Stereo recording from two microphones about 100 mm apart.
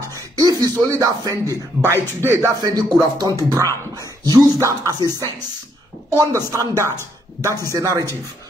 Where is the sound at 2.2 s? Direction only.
25° right (ahead or behind).